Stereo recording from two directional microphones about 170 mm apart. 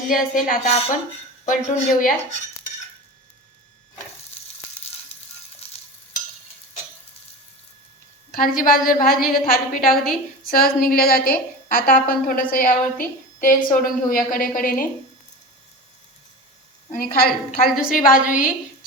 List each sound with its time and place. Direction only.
0.1 s a woman's voice: 55° left (ahead or behind)
5.6 s stir: 35° left (ahead or behind)
8.3 s a woman's voice: 55° left (ahead or behind)
16.9 s a woman's voice: 55° left (ahead or behind)